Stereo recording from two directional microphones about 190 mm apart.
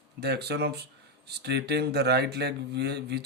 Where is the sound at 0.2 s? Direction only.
60° right (ahead or behind).